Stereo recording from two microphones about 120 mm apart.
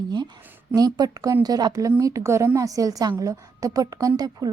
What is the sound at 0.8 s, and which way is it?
A woman's voice, 35° right (ahead or behind).